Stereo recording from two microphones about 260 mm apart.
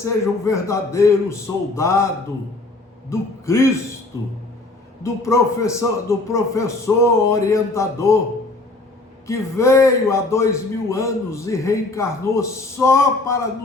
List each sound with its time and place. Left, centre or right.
0.0 s a man's voice: centre
3.1 s a man's voice: centre
9.2 s a man's voice: centre